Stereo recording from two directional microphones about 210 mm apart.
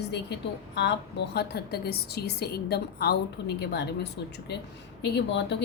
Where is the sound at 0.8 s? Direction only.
50° left (ahead or behind).